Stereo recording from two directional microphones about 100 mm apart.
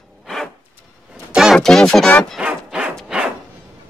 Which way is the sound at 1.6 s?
5° left (ahead or behind).